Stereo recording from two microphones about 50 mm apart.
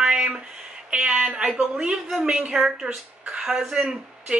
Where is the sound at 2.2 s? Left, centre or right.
Centre.